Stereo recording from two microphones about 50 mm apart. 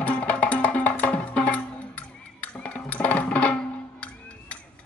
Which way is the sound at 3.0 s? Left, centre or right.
Left.